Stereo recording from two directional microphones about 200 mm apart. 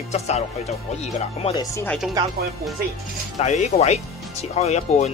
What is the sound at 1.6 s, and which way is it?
Speech, 15° left (ahead or behind).